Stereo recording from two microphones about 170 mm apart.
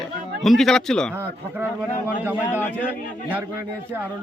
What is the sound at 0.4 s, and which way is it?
Speech, centre (ahead or behind).